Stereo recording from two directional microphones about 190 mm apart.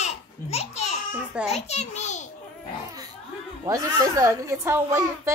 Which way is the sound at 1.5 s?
35° left (ahead or behind).